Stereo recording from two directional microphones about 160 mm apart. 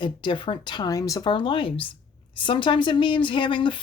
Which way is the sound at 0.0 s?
30° left (ahead or behind).